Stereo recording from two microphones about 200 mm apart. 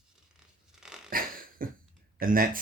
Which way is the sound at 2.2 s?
45° right (ahead or behind).